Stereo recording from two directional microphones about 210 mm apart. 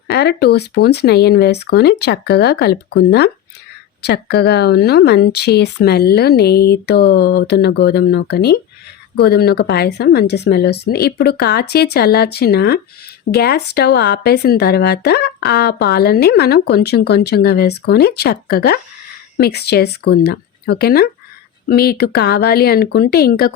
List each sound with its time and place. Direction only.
0.1 s speech: 50° left (ahead or behind)